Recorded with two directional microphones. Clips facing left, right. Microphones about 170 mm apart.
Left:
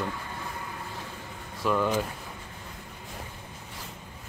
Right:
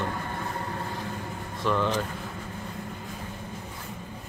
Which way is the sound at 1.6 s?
10° left (ahead or behind).